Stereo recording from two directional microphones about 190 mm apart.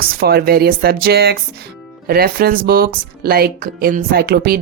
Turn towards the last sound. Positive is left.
turn(degrees=-50)  # may be behind; listen again after turning